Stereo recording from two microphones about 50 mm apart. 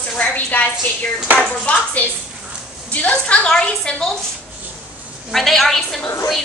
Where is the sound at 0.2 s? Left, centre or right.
Left.